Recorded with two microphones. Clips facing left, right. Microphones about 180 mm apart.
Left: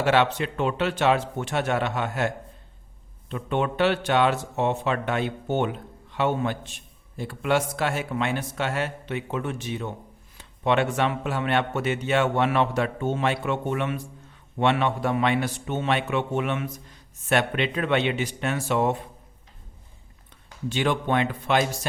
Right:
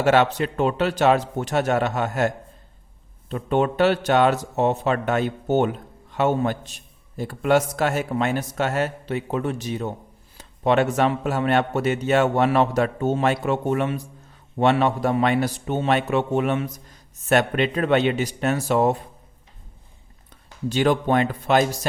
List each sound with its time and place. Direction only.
0.0 s speech: 45° right (ahead or behind)
20.7 s speech: 40° right (ahead or behind)